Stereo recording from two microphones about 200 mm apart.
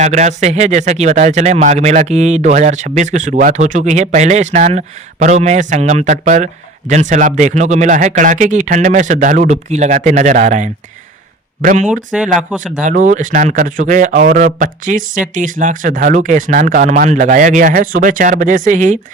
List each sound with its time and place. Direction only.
0.0 s speech: 35° right (ahead or behind)
12.4 s speech: 5° right (ahead or behind)
12.8 s speech: 40° right (ahead or behind)